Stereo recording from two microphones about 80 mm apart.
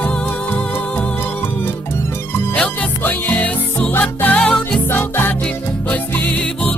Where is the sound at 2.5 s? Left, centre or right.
Centre.